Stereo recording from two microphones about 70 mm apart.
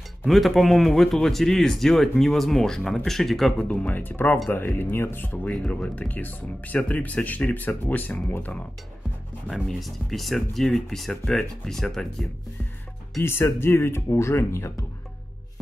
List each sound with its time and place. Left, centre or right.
0.2 s speech: centre
3.6 s speech: centre
5.5 s speech: centre
9.5 s speech: centre
13.2 s speech: left